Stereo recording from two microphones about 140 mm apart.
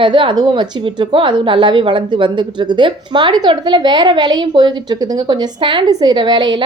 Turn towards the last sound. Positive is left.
turn(degrees=-35)  # may be behind; listen again after turning